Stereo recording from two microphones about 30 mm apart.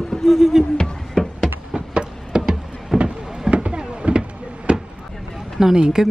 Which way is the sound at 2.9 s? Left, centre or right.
Right.